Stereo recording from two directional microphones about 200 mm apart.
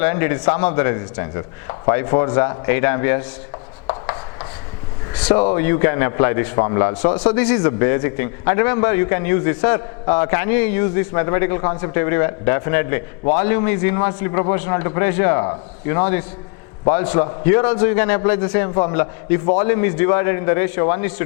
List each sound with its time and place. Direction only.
0.0 s a man's voice: 15° left (ahead or behind)
4.0 s chopping: 20° left (ahead or behind)
5.2 s a man's voice: 10° left (ahead or behind)